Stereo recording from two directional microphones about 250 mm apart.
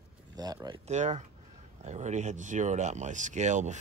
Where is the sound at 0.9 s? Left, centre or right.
Right.